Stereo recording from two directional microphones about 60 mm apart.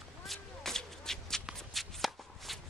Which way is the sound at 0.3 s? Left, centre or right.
Centre.